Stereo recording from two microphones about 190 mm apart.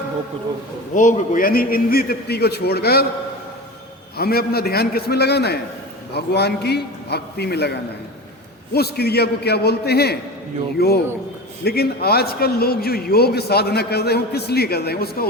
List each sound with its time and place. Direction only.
0.9 s a man's voice: 40° left (ahead or behind)
4.2 s speech: 55° left (ahead or behind)